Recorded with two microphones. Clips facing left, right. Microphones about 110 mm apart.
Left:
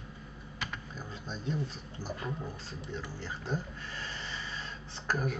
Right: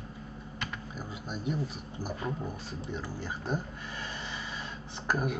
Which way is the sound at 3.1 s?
15° right (ahead or behind).